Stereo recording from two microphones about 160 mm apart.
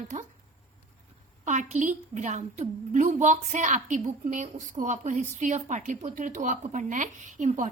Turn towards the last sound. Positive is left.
turn(degrees=-50)  # may be behind; listen again after turning